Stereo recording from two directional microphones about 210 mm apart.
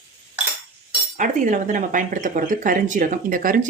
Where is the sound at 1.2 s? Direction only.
40° right (ahead or behind).